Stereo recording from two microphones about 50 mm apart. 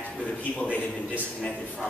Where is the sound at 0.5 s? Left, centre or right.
Left.